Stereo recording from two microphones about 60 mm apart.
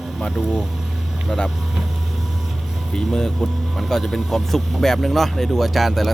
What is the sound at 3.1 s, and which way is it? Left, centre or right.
Speech, centre.